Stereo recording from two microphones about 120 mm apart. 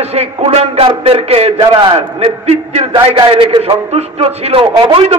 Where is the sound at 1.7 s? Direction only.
40° right (ahead or behind).